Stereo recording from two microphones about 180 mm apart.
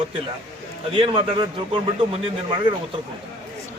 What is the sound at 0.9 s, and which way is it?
Speech, 30° right (ahead or behind).